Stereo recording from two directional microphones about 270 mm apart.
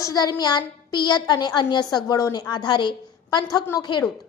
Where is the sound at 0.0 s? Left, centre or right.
Centre.